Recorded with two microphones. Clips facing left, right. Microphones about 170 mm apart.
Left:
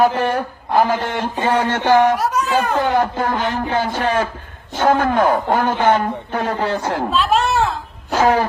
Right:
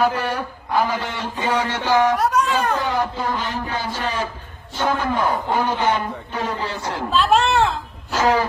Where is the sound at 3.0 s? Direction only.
55° left (ahead or behind).